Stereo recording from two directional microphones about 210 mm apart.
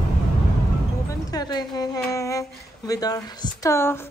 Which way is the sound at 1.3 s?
20° left (ahead or behind).